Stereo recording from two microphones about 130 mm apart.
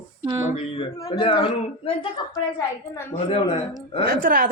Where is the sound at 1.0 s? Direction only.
40° left (ahead or behind).